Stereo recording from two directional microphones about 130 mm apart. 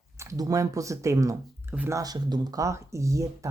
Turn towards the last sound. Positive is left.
turn(degrees=-25)  # may be behind; listen again after turning